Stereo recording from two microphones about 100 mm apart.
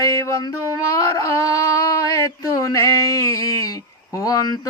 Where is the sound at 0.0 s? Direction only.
35° left (ahead or behind).